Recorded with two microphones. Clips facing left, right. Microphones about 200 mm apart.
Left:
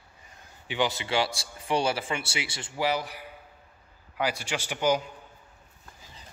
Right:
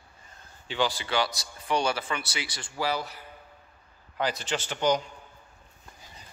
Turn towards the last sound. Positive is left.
turn(degrees=10)  # may be behind; listen again after turning